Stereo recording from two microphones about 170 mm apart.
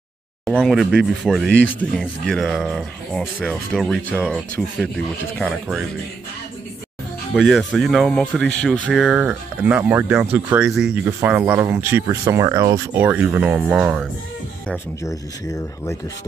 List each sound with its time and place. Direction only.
0.6 s speech: centre (ahead or behind)
7.3 s speech: centre (ahead or behind)
8.9 s speech: 5° right (ahead or behind)
15.0 s speech: 20° left (ahead or behind)